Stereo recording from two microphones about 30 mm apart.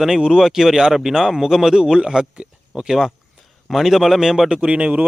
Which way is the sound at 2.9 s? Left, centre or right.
Centre.